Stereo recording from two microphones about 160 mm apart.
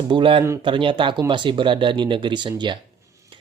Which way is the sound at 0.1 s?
30° right (ahead or behind).